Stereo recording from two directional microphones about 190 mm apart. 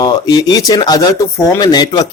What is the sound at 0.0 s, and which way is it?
Speech, 20° left (ahead or behind).